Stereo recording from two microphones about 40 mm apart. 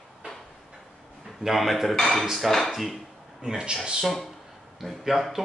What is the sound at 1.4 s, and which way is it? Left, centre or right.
Speech, centre.